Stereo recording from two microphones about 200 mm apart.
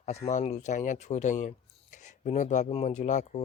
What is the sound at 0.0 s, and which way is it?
Speech, 35° left (ahead or behind).